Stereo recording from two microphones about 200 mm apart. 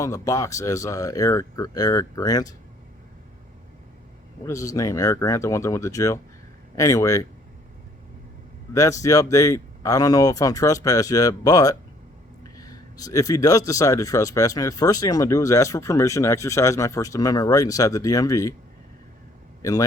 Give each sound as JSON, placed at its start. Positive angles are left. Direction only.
{"t": 0.0, "sound": "speech", "side_deg": 15}
{"t": 4.4, "sound": "speech", "side_deg": 15}
{"t": 8.7, "sound": "speech", "side_deg": 15}